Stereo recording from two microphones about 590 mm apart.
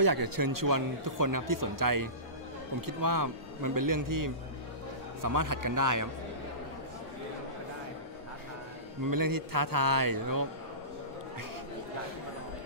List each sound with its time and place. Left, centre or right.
0.0 s speech: right
9.0 s speech: right